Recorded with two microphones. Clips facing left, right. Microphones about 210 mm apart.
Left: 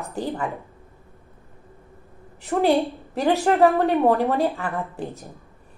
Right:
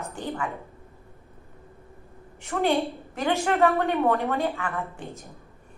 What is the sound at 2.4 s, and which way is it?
A woman's voice, 35° left (ahead or behind).